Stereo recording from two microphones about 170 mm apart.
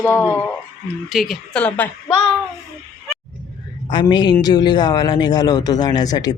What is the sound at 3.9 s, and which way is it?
Speech, 25° left (ahead or behind).